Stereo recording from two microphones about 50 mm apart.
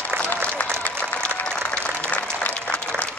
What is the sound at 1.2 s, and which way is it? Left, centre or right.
Applause, left.